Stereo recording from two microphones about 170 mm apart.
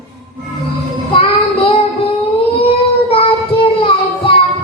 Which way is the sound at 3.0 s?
35° left (ahead or behind).